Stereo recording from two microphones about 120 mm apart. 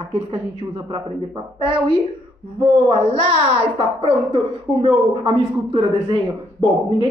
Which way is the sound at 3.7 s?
45° right (ahead or behind).